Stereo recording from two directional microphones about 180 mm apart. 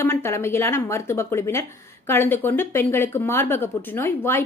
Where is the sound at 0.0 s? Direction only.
15° left (ahead or behind).